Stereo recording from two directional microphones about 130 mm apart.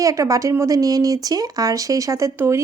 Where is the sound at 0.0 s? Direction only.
25° right (ahead or behind).